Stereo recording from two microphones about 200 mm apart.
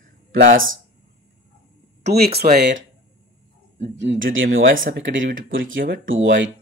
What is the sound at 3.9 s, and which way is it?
Speech, 65° right (ahead or behind).